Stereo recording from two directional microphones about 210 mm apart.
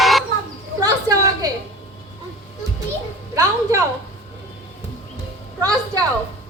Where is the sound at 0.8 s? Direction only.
20° right (ahead or behind).